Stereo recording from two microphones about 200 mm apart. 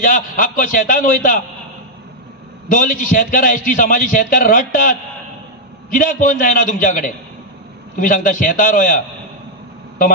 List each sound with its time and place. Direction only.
0.0 s a man's voice: 45° left (ahead or behind)
2.7 s a man's voice: 45° left (ahead or behind)
5.9 s a man's voice: 45° left (ahead or behind)